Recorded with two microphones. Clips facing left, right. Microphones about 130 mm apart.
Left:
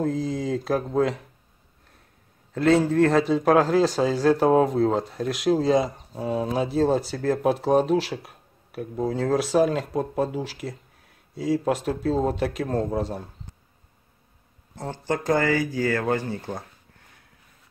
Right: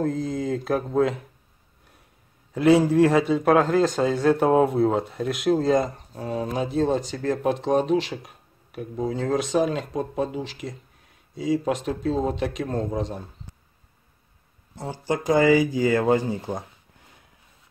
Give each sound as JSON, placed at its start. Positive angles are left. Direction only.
{"t": 0.0, "sound": "a man's voice", "side_deg": 0}
{"t": 2.5, "sound": "a man's voice", "side_deg": -10}
{"t": 14.8, "sound": "speech", "side_deg": -10}